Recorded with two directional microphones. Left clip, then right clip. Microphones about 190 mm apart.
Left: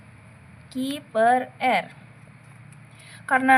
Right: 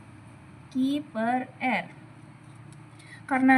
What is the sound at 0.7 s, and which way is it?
Speech, 45° left (ahead or behind).